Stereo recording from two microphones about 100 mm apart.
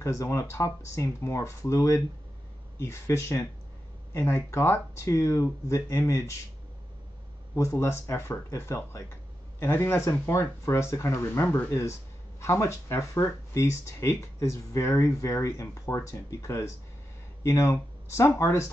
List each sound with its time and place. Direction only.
0.0 s speech: 30° left (ahead or behind)
7.5 s speech: 30° left (ahead or behind)